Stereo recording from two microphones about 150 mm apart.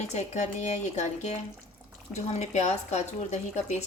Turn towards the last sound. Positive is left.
turn(degrees=50)  # may be behind; listen again after turning